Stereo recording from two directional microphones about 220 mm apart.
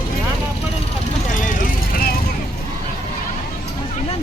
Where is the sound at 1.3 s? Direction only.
35° left (ahead or behind).